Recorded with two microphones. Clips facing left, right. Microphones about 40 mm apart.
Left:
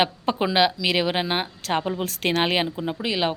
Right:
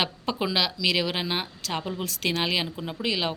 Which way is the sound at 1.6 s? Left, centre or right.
Left.